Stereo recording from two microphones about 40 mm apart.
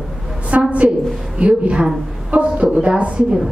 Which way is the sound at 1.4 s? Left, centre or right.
Right.